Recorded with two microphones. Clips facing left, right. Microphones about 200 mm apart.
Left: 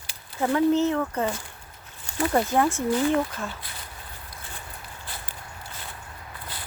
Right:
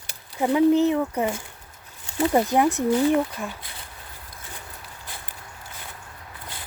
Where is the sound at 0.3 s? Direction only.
15° right (ahead or behind).